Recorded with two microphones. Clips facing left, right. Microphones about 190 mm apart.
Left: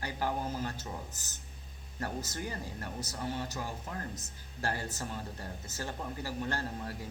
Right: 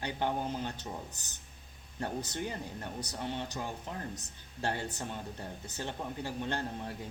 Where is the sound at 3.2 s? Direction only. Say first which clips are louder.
Even; 25° right (ahead or behind).